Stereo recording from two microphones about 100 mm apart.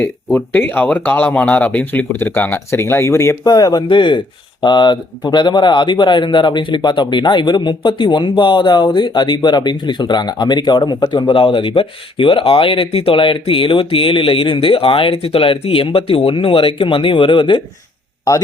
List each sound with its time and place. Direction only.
0.0 s speech: 15° left (ahead or behind)
3.5 s speech: 40° left (ahead or behind)
3.8 s speech: 50° left (ahead or behind)